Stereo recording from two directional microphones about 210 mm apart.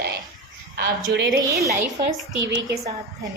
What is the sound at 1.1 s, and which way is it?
Speech, 55° right (ahead or behind).